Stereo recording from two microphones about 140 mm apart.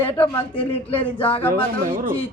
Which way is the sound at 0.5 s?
40° left (ahead or behind).